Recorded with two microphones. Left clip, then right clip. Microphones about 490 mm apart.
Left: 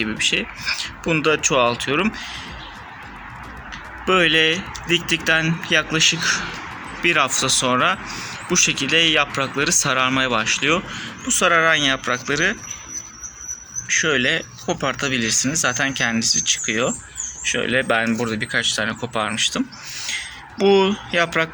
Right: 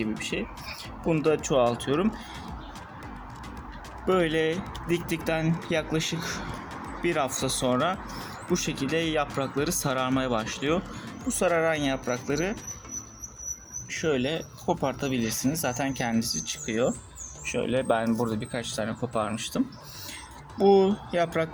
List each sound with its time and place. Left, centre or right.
0.0 s speech: right
4.0 s speech: right
13.8 s speech: right